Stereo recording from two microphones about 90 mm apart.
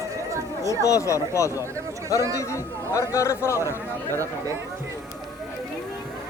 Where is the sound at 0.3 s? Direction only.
35° right (ahead or behind).